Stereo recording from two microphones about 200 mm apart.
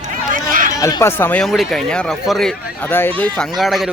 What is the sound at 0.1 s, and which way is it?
Run, 40° right (ahead or behind).